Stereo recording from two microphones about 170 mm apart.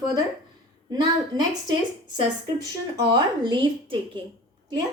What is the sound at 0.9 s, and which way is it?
Speech, 25° right (ahead or behind).